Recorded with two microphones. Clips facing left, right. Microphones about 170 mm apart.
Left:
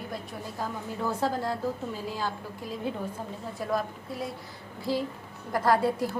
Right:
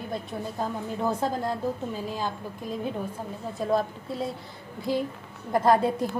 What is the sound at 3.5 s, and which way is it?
A woman's voice, 25° right (ahead or behind).